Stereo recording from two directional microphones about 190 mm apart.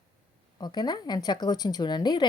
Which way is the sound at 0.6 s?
20° left (ahead or behind).